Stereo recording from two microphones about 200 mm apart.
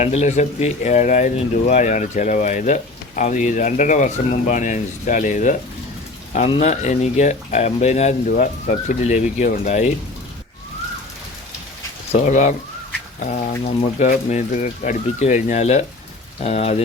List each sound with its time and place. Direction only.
0.0 s speech: 35° left (ahead or behind)
12.2 s speech: 40° left (ahead or behind)